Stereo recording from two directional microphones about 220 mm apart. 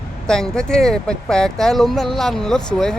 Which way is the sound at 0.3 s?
5° left (ahead or behind).